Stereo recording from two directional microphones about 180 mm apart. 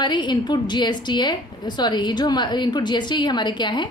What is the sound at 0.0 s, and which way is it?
A woman's voice, 25° left (ahead or behind).